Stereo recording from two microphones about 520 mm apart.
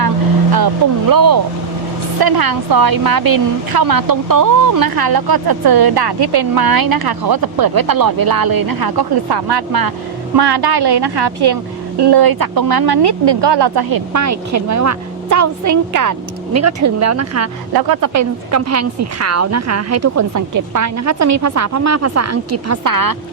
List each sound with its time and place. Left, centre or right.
1.1 s a woman's voice: right
17.7 s a woman's voice: right